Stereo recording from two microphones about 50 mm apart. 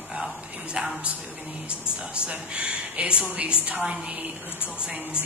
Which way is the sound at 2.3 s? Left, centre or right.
Right.